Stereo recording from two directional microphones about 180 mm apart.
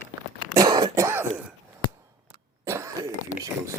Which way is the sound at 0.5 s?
20° right (ahead or behind).